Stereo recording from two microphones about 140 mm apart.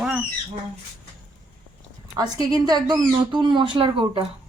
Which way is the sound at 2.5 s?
30° right (ahead or behind).